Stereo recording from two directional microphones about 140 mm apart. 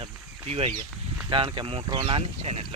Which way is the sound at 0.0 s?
45° right (ahead or behind).